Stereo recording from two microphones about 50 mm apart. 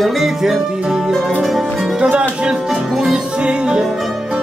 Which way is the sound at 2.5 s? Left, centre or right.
Centre.